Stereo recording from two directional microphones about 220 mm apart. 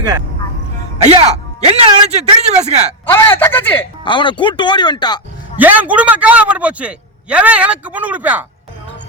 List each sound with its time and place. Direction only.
1.0 s speech: 25° right (ahead or behind)
3.1 s speech: 10° left (ahead or behind)
4.0 s speech: 20° left (ahead or behind)
5.5 s a man's voice: 10° right (ahead or behind)